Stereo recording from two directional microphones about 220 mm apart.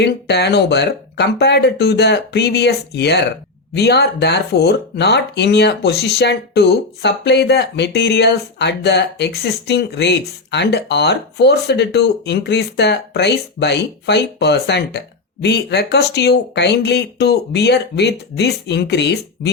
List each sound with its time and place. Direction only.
0.0 s speech: 50° left (ahead or behind)